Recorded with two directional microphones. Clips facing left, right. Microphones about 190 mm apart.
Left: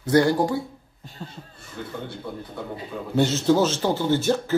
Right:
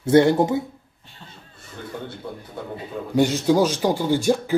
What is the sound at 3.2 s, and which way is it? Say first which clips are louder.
Speech: right 2 dB; 15° right (ahead or behind).